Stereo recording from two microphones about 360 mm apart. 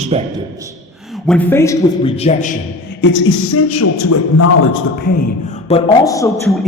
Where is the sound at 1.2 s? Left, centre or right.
Centre.